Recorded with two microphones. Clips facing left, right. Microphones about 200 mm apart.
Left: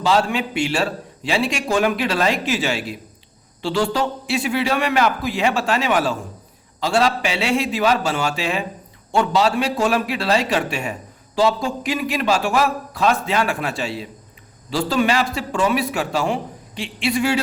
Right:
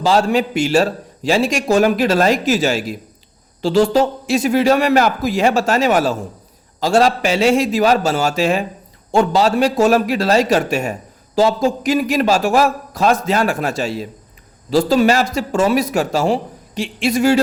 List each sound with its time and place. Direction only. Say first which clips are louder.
0.0 s a man's voice: right 4 dB; 40° right (ahead or behind)